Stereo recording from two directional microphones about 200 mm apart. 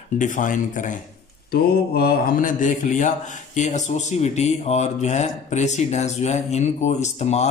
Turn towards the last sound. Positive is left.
turn(degrees=35)  # may be behind; listen again after turning